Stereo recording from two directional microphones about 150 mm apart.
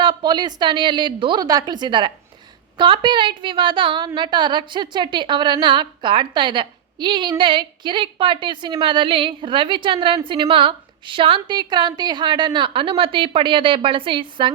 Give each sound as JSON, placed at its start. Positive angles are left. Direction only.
{"t": 0.0, "sound": "a woman's voice", "side_deg": -30}